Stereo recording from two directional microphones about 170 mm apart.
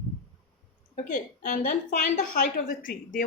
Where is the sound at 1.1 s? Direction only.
50° left (ahead or behind).